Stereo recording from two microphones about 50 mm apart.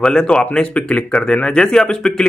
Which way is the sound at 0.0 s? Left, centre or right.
Centre.